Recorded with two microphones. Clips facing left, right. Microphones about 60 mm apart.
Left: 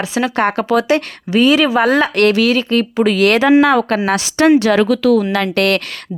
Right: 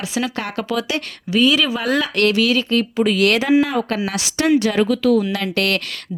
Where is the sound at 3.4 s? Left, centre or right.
Left.